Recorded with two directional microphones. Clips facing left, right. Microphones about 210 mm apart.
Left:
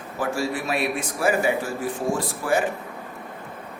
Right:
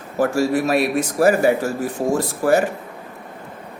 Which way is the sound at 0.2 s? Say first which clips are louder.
Right 8 dB; 40° right (ahead or behind).